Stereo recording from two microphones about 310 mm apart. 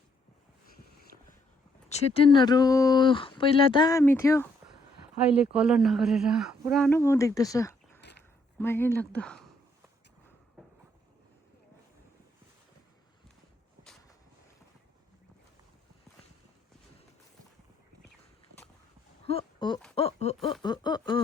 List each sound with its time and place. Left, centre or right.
1.1 s vehicle: right
1.9 s speech: centre
5.5 s speech: centre
19.2 s a sound: centre
20.0 s speech: centre